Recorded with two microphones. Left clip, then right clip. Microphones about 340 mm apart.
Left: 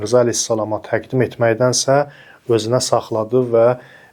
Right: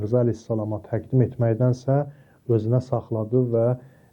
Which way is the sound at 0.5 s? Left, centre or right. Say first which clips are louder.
Left 9 dB; centre.